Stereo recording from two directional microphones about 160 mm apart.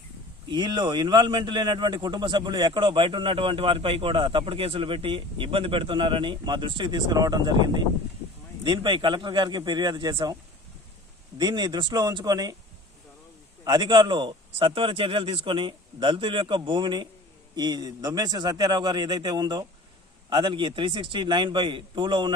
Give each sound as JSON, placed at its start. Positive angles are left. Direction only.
{"t": 0.5, "sound": "a man's voice", "side_deg": -25}
{"t": 11.3, "sound": "a man's voice", "side_deg": -25}
{"t": 13.7, "sound": "a man's voice", "side_deg": -30}